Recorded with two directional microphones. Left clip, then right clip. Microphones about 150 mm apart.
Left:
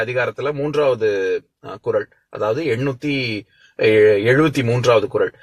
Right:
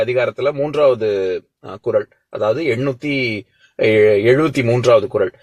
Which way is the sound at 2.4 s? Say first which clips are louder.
Right 2 dB; 25° right (ahead or behind).